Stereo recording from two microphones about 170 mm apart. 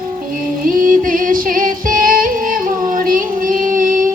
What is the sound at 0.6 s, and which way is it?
Music, 55° right (ahead or behind).